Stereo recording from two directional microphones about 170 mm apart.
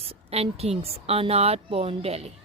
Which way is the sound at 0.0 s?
35° right (ahead or behind).